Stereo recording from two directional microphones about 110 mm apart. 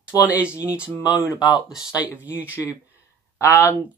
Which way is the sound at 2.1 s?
15° right (ahead or behind).